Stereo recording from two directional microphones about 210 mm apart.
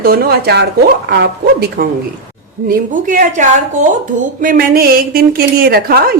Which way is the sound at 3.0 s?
40° right (ahead or behind).